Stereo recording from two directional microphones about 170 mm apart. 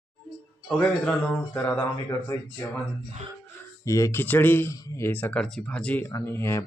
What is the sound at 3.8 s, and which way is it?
Speech, 20° left (ahead or behind).